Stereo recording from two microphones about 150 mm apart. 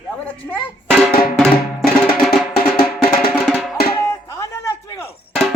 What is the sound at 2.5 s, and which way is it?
Music, 85° left.